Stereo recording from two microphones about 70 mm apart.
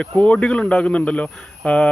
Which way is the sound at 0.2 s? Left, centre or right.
Centre.